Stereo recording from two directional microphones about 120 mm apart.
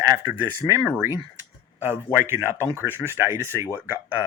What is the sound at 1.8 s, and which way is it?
Speech, 20° right (ahead or behind).